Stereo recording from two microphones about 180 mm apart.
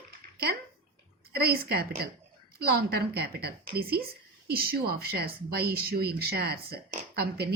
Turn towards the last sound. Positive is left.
turn(degrees=-60)  # may be behind; listen again after turning